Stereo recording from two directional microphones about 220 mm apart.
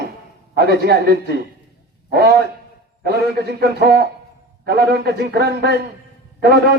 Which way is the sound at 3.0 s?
45° right (ahead or behind).